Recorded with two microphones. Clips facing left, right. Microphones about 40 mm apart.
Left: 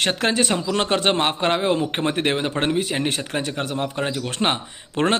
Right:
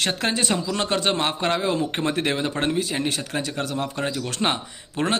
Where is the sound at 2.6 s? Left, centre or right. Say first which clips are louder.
Left 2 dB; left.